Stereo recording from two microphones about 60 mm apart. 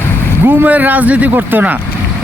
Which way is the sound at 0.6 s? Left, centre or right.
Right.